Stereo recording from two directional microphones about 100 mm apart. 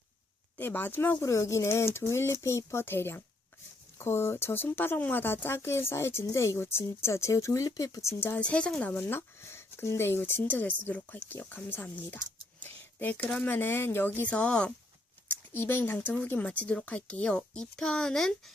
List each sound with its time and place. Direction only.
0.6 s speech: 20° left (ahead or behind); by 8.1 s 35° left (ahead or behind)
8.2 s speech: 15° left (ahead or behind)
12.6 s a sound: 20° left (ahead or behind)
13.4 s speech: 20° left (ahead or behind)
15.5 s speech: 20° left (ahead or behind); by 18.5 s 5° left (ahead or behind)